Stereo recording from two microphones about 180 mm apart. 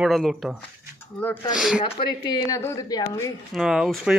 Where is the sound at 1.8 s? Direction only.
30° left (ahead or behind).